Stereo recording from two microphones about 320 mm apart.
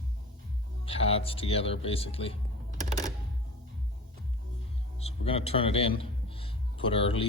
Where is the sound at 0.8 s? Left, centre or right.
Centre.